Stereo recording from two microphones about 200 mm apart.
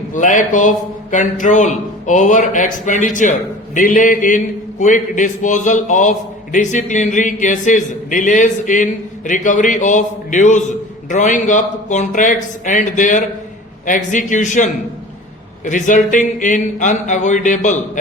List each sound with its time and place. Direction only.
0.1 s a man's voice: 40° left (ahead or behind)